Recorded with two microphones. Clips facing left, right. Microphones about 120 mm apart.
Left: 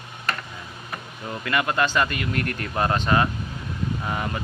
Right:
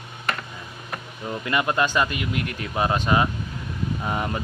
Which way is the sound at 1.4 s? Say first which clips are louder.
Even; 20° right (ahead or behind).